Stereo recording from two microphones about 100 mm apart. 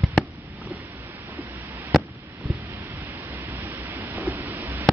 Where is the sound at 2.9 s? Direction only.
20° right (ahead or behind).